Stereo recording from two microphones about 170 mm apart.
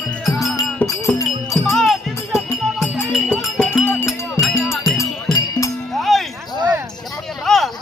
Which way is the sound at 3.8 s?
10° left (ahead or behind).